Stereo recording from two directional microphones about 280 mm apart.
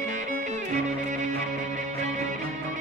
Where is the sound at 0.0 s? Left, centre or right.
Right.